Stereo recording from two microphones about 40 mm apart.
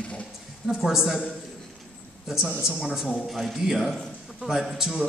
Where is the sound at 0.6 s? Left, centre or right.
Centre.